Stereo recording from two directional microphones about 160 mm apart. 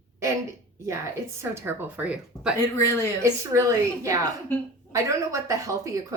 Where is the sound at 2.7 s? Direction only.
20° left (ahead or behind).